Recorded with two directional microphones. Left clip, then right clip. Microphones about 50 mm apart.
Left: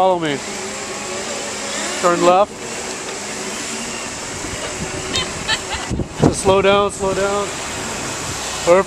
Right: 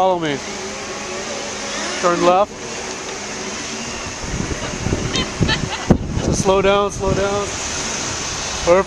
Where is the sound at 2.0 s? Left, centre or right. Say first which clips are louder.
Left 1 dB; right.